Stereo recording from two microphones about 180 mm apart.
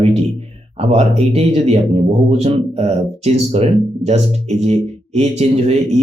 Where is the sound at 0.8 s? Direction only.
35° right (ahead or behind).